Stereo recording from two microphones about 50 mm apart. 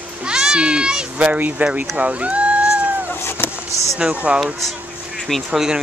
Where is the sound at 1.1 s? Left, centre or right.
Right.